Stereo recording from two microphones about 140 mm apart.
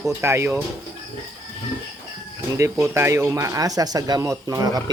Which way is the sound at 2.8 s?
20° right (ahead or behind).